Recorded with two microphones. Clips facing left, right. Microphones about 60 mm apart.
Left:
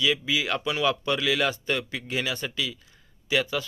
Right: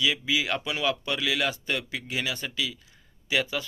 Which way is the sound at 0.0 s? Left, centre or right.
Centre.